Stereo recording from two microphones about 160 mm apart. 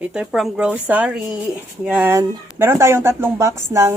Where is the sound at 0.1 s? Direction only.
5° right (ahead or behind).